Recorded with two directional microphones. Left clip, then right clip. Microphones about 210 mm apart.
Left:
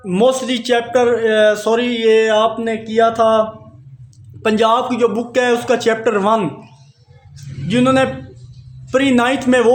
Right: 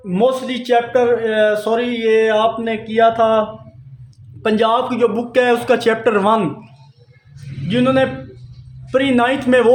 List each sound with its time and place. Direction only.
0.0 s a man's voice: 30° left (ahead or behind)
4.4 s a man's voice: 15° left (ahead or behind); by 6.5 s centre (ahead or behind)
7.7 s a man's voice: 20° left (ahead or behind)